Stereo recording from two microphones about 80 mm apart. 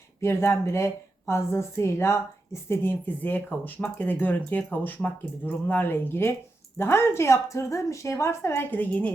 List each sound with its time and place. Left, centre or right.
0.2 s a woman's voice: left